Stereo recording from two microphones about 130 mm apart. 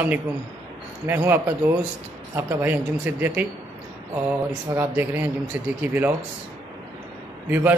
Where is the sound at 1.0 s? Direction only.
15° right (ahead or behind).